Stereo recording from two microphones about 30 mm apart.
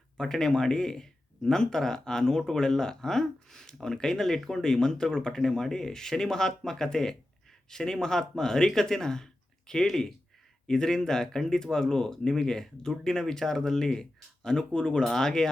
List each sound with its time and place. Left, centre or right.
0.2 s speech: centre
5.4 s speech: centre
10.7 s speech: left
14.7 s speech: left
15.0 s speech: centre